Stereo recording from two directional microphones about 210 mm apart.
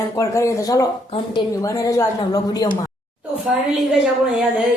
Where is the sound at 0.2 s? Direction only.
15° left (ahead or behind).